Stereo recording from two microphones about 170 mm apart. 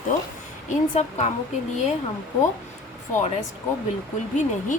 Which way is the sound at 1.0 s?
40° left (ahead or behind).